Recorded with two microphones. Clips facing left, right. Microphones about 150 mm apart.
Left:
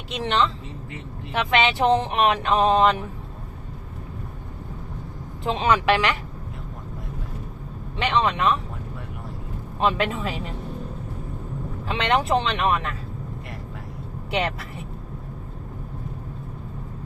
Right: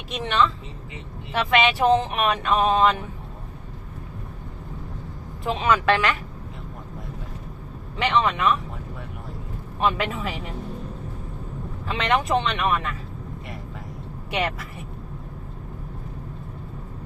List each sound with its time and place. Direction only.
0.1 s speech: 30° left (ahead or behind)
1.6 s a sound: 30° left (ahead or behind)
5.4 s speech: 25° left (ahead or behind)
7.9 s speech: 30° left (ahead or behind)
9.8 s speech: 25° left (ahead or behind)
11.9 s a sound: 30° left (ahead or behind)
14.3 s speech: 30° left (ahead or behind)